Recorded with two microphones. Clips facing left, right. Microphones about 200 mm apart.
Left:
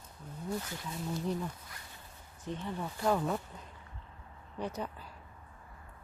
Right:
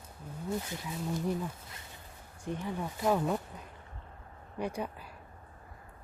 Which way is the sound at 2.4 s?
10° right (ahead or behind).